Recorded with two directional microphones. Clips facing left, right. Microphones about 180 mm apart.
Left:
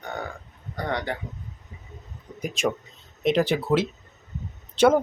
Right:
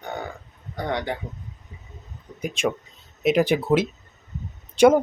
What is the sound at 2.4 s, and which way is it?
Speech, centre (ahead or behind).